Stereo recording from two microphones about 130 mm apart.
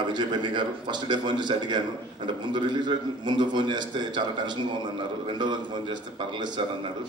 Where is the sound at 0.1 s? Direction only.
35° right (ahead or behind).